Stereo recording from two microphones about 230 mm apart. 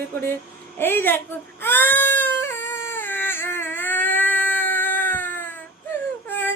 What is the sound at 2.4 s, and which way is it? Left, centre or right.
Baby cry, centre.